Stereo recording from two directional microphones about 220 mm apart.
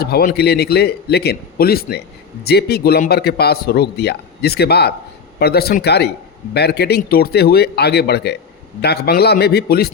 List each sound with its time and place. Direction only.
0.0 s a man's voice: 45° left (ahead or behind)